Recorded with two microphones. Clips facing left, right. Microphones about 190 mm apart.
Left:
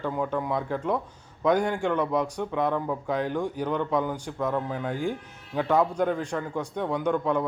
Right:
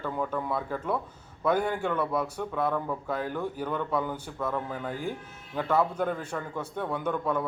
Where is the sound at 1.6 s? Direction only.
15° left (ahead or behind).